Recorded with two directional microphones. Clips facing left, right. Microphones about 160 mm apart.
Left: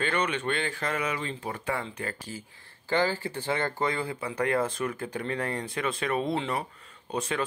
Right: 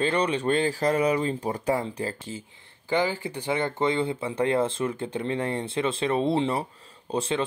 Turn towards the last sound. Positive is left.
turn(degrees=-30)  # may be behind; listen again after turning